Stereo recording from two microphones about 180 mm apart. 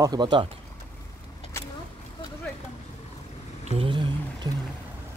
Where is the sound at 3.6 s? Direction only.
30° right (ahead or behind).